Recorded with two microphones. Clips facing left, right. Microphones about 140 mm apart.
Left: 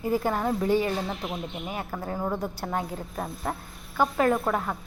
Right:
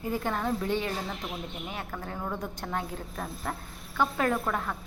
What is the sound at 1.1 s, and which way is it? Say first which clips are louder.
Speech: left 4 dB; 25° left (ahead or behind).